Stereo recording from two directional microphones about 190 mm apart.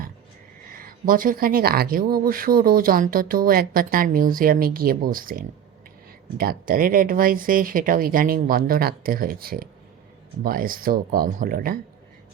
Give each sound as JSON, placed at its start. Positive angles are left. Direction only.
{"t": 0.7, "sound": "speech", "side_deg": -50}